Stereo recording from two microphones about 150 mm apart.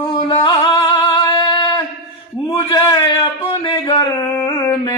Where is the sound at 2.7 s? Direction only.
35° left (ahead or behind).